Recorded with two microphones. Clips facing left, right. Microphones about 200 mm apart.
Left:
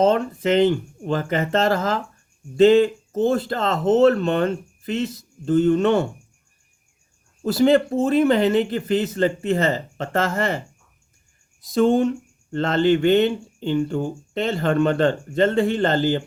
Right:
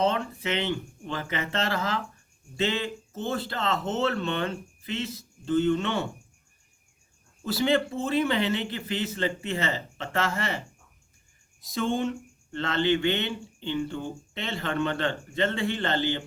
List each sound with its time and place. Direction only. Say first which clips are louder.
0.0 s speech: left 8 dB; 45° left (ahead or behind)
7.4 s speech: left 8 dB; 45° left (ahead or behind)
11.7 s speech: left 10 dB; 45° left (ahead or behind)